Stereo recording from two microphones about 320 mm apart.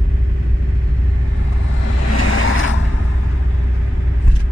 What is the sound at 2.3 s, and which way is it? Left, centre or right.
Vehicle, left.